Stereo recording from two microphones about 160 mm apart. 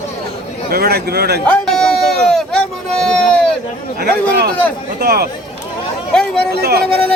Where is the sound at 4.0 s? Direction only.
75° right (ahead or behind).